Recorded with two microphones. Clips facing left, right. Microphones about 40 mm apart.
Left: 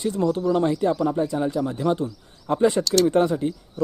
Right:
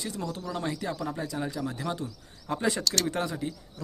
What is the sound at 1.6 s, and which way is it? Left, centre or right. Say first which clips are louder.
Speech: left 8 dB; left.